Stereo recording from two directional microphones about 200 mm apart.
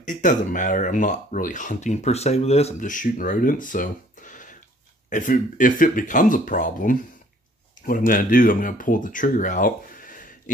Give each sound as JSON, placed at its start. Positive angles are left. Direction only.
{"t": 0.0, "sound": "speech", "side_deg": 40}